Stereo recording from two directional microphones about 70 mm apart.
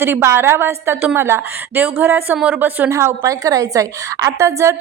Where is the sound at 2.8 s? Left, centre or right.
Right.